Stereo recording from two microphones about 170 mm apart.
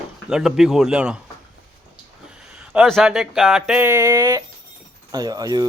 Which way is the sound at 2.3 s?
5° right (ahead or behind).